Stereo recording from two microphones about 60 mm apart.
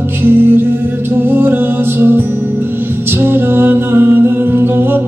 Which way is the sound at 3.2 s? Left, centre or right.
Right.